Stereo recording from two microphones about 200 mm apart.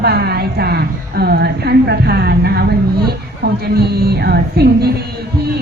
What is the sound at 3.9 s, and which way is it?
Music, 50° right (ahead or behind).